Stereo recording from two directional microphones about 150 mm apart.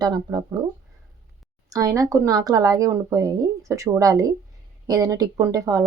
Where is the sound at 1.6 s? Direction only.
20° right (ahead or behind).